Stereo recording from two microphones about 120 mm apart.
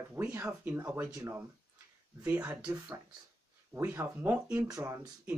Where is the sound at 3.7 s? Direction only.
15° right (ahead or behind).